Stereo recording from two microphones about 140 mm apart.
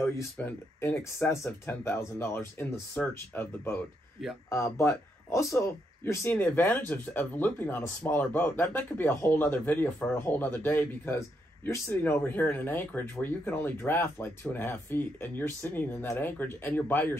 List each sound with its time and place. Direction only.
0.0 s speech: 20° left (ahead or behind)